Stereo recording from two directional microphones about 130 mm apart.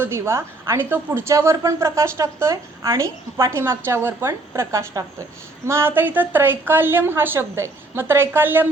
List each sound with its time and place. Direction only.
0.0 s a woman's voice: 20° right (ahead or behind)